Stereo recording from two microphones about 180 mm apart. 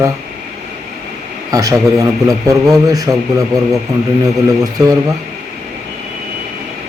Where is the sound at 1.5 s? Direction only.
20° right (ahead or behind).